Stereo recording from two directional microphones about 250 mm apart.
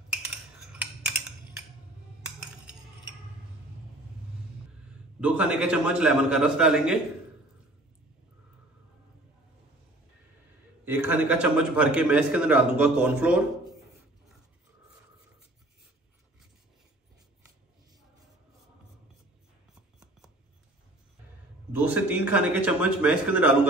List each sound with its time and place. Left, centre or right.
5.2 s a man's voice: centre
10.9 s a man's voice: centre
21.7 s a man's voice: centre